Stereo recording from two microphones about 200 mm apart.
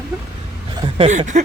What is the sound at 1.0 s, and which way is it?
Speech, 35° right (ahead or behind).